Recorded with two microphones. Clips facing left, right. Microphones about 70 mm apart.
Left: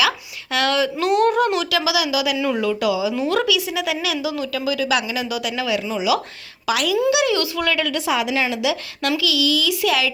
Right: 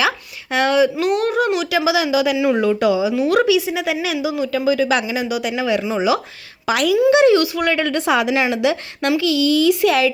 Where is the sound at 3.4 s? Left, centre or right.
Right.